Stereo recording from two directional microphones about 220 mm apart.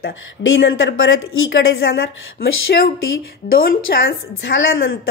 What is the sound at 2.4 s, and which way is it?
A woman's voice, 45° left (ahead or behind).